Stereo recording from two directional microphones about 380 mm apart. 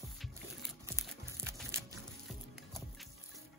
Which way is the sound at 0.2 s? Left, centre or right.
Centre.